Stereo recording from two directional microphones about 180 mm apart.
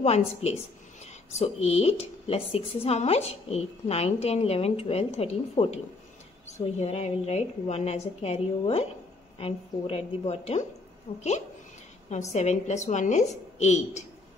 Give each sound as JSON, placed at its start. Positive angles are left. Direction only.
{"t": 0.0, "sound": "a woman's voice", "side_deg": 35}